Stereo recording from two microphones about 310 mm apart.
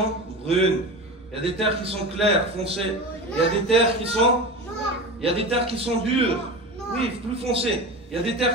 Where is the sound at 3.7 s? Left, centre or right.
Centre.